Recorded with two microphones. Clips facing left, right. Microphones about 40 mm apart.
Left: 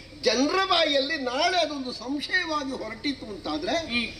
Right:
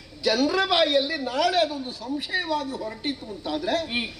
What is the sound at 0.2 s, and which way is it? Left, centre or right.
A man's voice, right.